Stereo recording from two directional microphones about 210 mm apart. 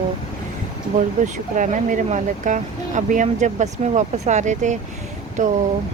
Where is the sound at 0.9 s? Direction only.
35° right (ahead or behind).